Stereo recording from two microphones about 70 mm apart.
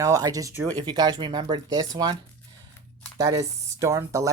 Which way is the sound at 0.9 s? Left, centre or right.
Right.